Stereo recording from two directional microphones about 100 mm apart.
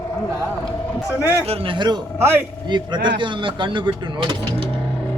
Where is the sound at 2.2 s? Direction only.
20° right (ahead or behind).